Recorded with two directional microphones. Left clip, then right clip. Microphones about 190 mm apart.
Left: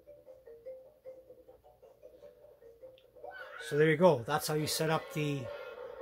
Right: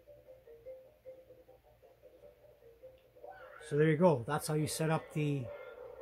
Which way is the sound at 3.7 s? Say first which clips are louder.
Left 3 dB; 15° right (ahead or behind).